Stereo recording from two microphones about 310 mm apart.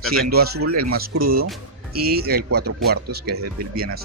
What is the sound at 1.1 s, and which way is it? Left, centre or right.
Speech, right.